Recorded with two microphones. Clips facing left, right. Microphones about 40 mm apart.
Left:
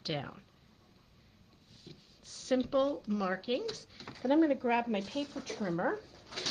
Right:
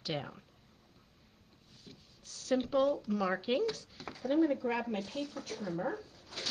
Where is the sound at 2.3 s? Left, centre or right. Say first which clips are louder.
Left 1 dB; centre.